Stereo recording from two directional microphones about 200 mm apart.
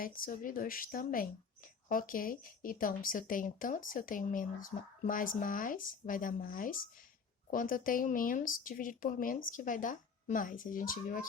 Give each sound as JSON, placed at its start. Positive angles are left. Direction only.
{"t": 0.0, "sound": "speech", "side_deg": 45}